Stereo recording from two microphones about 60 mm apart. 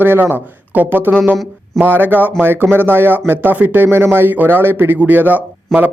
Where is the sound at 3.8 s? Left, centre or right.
Right.